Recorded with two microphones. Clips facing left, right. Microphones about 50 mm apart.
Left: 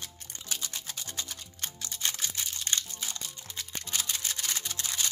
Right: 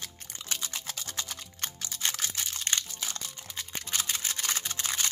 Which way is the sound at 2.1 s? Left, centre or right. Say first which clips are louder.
Right 1 dB; right.